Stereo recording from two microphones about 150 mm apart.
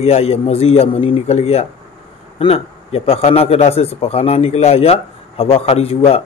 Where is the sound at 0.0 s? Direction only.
45° left (ahead or behind).